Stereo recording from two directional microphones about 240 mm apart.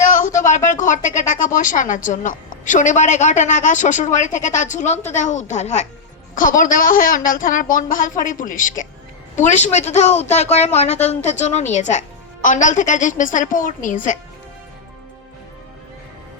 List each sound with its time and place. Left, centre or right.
0.0 s a woman's voice: left